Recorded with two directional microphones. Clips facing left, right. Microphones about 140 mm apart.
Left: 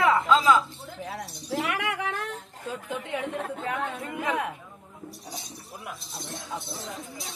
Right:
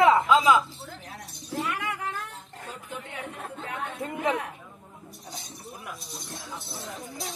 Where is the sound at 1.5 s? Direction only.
90° left.